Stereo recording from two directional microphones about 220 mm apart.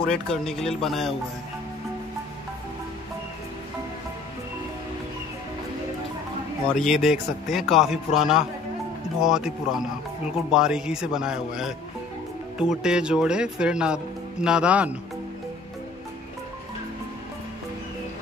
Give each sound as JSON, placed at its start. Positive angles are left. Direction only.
{"t": 0.1, "sound": "speech", "side_deg": 0}
{"t": 6.7, "sound": "speech", "side_deg": 0}